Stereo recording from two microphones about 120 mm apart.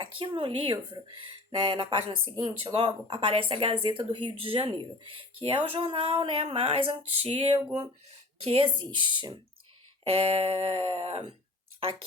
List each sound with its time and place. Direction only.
0.0 s speech: 45° right (ahead or behind)